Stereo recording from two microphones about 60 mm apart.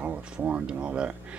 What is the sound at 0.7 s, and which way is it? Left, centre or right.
Speech, centre.